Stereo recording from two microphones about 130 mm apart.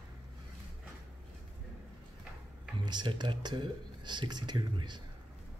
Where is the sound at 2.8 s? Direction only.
35° right (ahead or behind).